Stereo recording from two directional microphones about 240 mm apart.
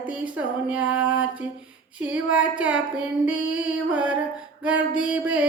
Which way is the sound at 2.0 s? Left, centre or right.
Centre.